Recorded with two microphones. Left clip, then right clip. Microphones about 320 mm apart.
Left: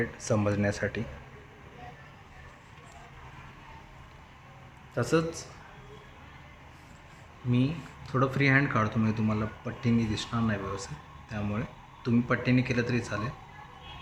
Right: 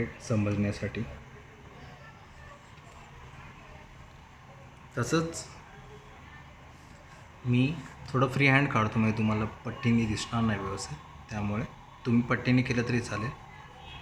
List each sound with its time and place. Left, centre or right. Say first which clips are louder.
0.2 s speech: left 4 dB; left
4.9 s speech: left 2 dB; centre
7.5 s speech: right 1 dB; centre